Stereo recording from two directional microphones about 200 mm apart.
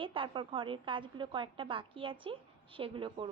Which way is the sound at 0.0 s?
25° right (ahead or behind).